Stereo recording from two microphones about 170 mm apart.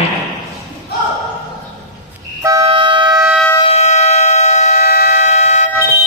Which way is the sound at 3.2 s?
5° right (ahead or behind).